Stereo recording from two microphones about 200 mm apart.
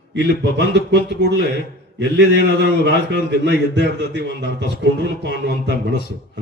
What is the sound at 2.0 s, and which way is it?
A man's voice, 60° right (ahead or behind).